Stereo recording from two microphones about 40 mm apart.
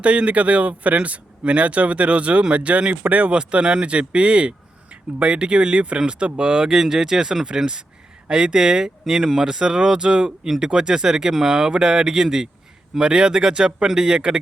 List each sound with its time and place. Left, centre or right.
0.0 s speech: right
3.0 s speech: right
3.3 s speech: right